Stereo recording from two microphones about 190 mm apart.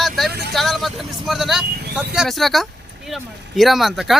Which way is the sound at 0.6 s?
Centre (ahead or behind).